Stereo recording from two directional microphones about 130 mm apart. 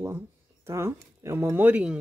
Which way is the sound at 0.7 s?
20° right (ahead or behind).